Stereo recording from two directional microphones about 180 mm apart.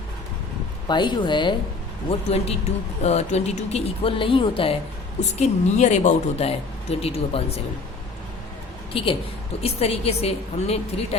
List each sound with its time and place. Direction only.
0.9 s speech: 25° left (ahead or behind)
5.4 s speech: 40° left (ahead or behind)
8.9 s a woman's voice: 30° left (ahead or behind)